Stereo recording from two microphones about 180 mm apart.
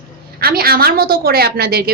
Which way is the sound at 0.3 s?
55° right (ahead or behind).